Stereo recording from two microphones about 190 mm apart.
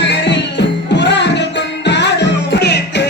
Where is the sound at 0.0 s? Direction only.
65° left (ahead or behind).